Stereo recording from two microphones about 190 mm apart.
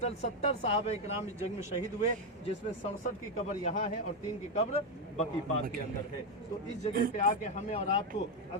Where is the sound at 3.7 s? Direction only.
35° left (ahead or behind).